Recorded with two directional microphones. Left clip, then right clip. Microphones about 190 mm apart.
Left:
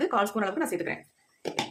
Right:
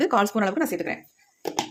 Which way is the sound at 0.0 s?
45° right (ahead or behind).